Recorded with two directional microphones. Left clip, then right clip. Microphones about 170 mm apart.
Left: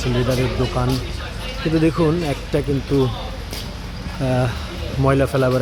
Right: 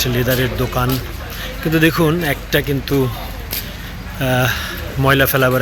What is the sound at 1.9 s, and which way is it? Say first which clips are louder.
Speech: right 3 dB; 20° right (ahead or behind).